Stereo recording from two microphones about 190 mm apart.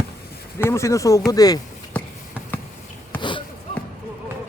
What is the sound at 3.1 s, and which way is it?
Basketball bounce, 25° left (ahead or behind).